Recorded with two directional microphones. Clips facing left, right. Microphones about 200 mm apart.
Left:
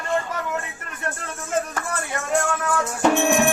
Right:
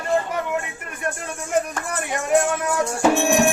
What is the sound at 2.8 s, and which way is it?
Music, centre (ahead or behind).